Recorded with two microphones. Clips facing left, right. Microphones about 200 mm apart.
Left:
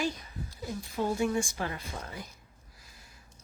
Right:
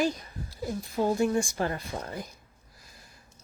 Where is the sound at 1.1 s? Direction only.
45° right (ahead or behind).